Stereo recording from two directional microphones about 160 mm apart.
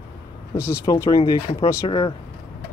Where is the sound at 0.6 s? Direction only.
20° left (ahead or behind).